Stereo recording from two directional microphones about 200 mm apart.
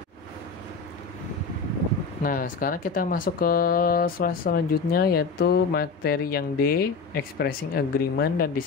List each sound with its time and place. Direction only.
2.2 s speech: 45° left (ahead or behind)